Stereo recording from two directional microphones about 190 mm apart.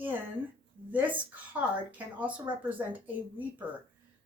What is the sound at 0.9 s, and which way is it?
A woman's voice, 10° right (ahead or behind).